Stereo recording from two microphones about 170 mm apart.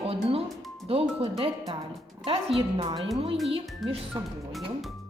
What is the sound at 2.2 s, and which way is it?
Speech, 35° right (ahead or behind).